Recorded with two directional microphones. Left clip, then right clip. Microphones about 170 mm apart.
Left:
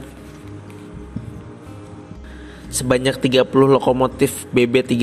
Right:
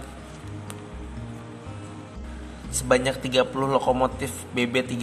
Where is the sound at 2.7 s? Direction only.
40° left (ahead or behind).